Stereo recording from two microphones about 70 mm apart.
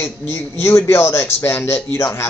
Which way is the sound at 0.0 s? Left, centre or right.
Left.